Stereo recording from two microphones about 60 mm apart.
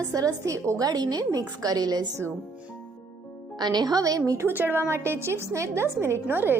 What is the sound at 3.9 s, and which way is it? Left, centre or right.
Speech, right.